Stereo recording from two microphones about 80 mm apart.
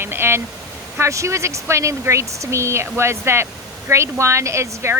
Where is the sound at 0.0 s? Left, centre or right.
Right.